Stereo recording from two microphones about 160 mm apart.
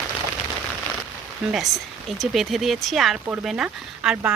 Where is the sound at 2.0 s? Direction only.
Centre (ahead or behind).